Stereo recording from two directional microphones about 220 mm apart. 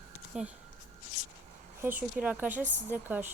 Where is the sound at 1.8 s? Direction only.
10° right (ahead or behind).